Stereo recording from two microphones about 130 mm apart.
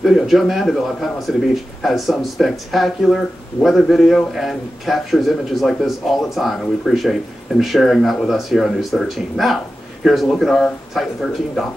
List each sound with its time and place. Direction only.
0.0 s speech: centre (ahead or behind)